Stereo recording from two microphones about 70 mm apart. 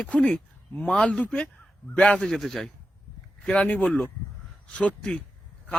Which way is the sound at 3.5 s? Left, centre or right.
Centre.